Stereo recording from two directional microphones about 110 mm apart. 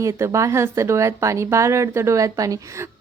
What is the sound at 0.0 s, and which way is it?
A woman's voice, 30° right (ahead or behind).